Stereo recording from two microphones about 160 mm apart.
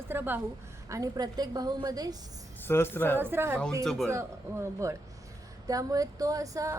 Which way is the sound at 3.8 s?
5° left (ahead or behind).